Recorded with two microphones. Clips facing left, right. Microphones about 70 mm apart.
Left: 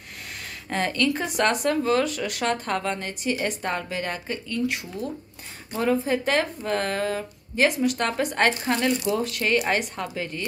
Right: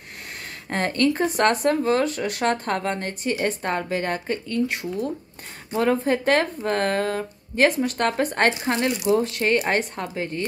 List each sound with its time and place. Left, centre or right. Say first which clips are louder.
0.7 s a woman's voice: right 2 dB; right